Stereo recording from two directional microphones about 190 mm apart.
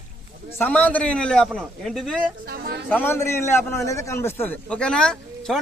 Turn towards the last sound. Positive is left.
turn(degrees=5)  # may be behind; listen again after turning